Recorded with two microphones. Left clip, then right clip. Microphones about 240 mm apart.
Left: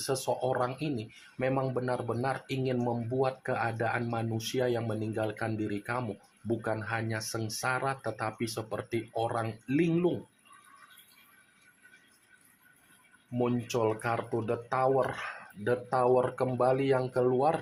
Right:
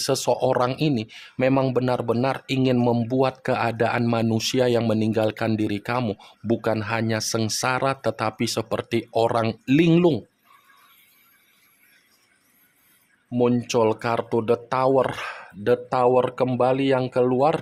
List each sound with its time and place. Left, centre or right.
0.0 s speech: right
13.3 s speech: right